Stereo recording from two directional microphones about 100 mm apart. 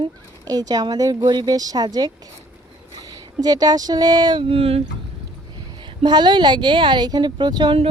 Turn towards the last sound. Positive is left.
turn(degrees=-45)  # may be behind; listen again after turning